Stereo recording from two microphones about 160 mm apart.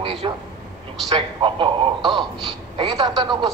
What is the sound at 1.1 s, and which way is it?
A man's voice, 30° right (ahead or behind).